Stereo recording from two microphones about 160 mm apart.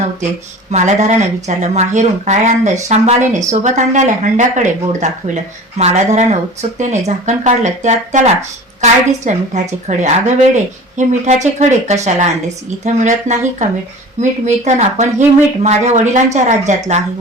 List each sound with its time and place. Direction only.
0.7 s speech: 45° right (ahead or behind)